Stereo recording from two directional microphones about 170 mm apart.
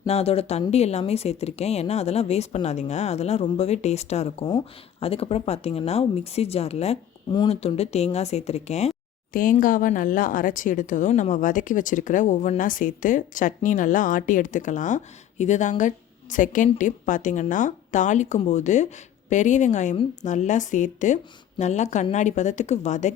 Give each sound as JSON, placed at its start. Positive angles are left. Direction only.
{"t": 0.1, "sound": "speech", "side_deg": 35}